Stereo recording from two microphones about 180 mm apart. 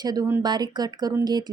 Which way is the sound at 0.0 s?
20° right (ahead or behind).